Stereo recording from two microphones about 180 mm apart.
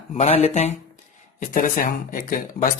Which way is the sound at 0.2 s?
35° left (ahead or behind).